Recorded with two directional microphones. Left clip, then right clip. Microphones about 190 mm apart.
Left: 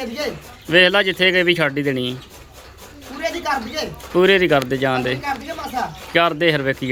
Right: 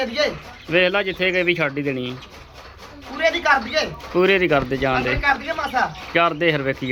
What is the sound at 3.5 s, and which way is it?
Speech, centre (ahead or behind).